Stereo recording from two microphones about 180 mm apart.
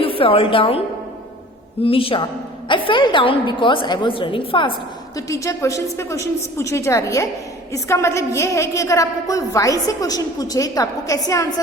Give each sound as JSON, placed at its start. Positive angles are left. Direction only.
{"t": 0.0, "sound": "a woman's voice", "side_deg": 30}
{"t": 1.8, "sound": "a man's voice", "side_deg": 30}